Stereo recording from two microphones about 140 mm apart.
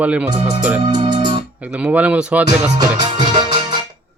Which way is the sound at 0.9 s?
30° right (ahead or behind).